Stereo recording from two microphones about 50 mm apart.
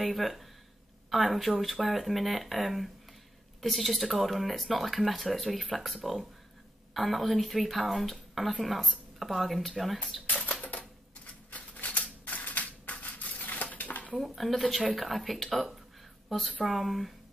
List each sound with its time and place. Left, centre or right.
0.0 s a woman's voice: centre
10.2 s typewriter: left
11.5 s a sound: left
13.4 s dishes: left
14.1 s speech: centre